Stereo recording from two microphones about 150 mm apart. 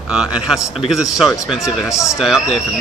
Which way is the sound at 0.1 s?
5° right (ahead or behind).